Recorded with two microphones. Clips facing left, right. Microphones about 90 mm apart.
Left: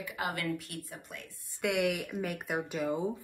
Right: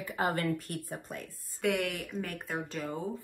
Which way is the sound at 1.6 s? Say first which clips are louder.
Even; 5° left (ahead or behind).